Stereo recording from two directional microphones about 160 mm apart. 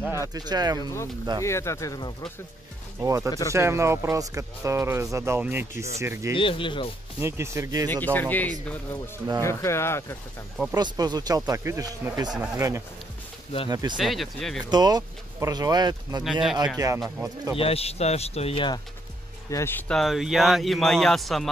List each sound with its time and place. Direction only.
0.0 s speech: 15° right (ahead or behind)
1.4 s speech: 15° left (ahead or behind)
3.0 s speech: 20° right (ahead or behind)
3.3 s speech: 20° left (ahead or behind)
3.5 s speech: 20° right (ahead or behind)
6.3 s speech: 35° left (ahead or behind)
7.2 s speech: 15° right (ahead or behind)
7.9 s speech: 10° left (ahead or behind)
10.7 s speech: 25° right (ahead or behind)
13.9 s a man's voice: centre (ahead or behind)
14.7 s speech: 25° right (ahead or behind)
17.6 s speech: 40° left (ahead or behind)
19.5 s speech: 15° left (ahead or behind)
19.9 s a man's voice: centre (ahead or behind)